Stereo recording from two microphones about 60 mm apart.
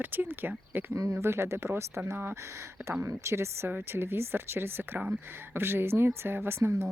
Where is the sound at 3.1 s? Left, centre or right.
Right.